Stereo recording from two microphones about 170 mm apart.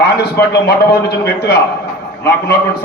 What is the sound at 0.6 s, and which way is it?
Speech, 70° left (ahead or behind).